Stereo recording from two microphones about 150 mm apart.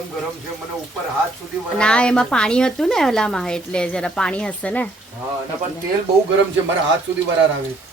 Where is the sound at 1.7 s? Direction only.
5° left (ahead or behind).